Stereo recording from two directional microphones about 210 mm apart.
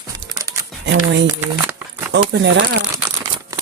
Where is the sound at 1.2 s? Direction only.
10° right (ahead or behind).